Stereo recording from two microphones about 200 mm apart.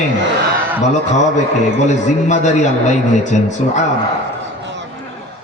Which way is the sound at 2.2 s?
35° left (ahead or behind).